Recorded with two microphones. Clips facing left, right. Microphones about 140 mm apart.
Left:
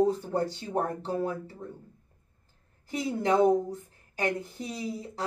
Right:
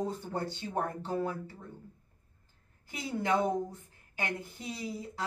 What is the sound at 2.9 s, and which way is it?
A woman's voice, 35° left (ahead or behind).